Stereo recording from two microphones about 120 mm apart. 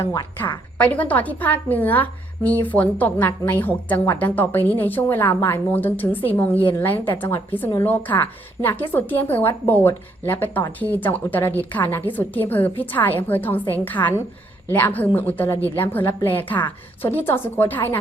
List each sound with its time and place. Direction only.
0.0 s a woman's voice: 25° left (ahead or behind)
0.8 s a woman's voice: 15° left (ahead or behind)